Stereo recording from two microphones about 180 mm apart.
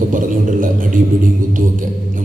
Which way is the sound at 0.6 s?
50° right (ahead or behind).